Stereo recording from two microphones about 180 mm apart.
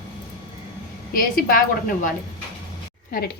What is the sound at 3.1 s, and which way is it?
Speech, 50° left (ahead or behind).